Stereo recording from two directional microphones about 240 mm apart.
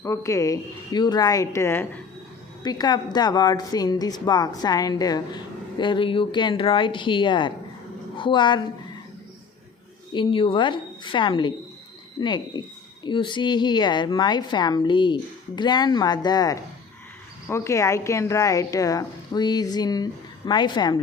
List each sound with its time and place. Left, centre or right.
0.0 s speech: centre
10.1 s speech: left